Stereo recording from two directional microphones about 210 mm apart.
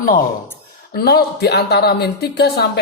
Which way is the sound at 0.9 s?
50° left (ahead or behind).